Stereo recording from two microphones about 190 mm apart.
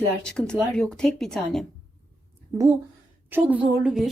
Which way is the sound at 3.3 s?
10° right (ahead or behind).